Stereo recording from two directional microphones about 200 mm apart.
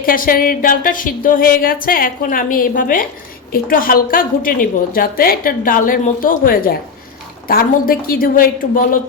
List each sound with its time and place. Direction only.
0.0 s a woman's voice: 45° left (ahead or behind)